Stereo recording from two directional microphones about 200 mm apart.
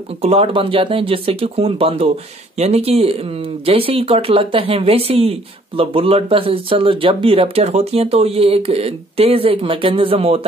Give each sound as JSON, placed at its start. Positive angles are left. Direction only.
{"t": 0.2, "sound": "speech", "side_deg": -30}